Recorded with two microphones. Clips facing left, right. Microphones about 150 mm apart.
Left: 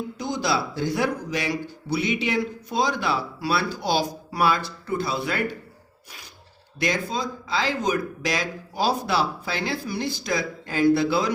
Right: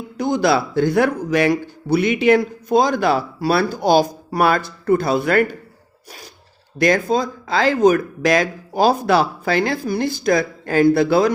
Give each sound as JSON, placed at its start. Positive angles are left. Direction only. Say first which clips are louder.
{"t": 0.2, "sound": "speech", "louder": "right 9 dB", "side_deg": -55}
{"t": 6.7, "sound": "speech", "louder": "right 9 dB", "side_deg": -50}